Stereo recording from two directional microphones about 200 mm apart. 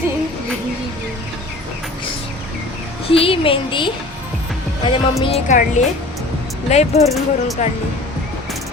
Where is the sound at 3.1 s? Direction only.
25° left (ahead or behind).